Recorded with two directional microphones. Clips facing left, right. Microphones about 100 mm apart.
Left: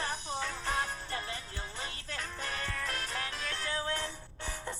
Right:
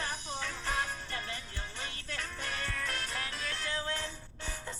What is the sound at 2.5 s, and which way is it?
Music, 35° left (ahead or behind).